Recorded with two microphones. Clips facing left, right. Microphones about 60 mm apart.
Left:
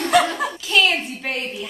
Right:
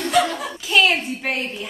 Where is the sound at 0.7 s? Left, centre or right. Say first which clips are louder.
Right 2 dB; centre.